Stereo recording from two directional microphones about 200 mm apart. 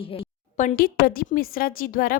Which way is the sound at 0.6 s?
45° left (ahead or behind).